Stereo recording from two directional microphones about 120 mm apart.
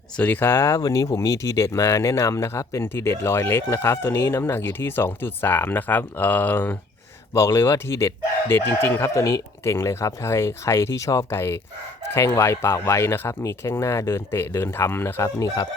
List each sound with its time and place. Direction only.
0.2 s speech: 15° left (ahead or behind)